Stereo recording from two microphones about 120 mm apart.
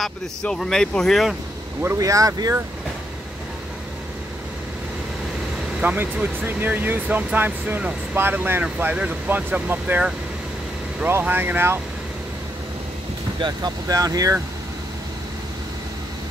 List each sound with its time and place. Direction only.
0.0 s speech: 5° left (ahead or behind)
1.8 s speech: 25° right (ahead or behind)
5.8 s speech: 10° right (ahead or behind)
13.4 s speech: 35° right (ahead or behind)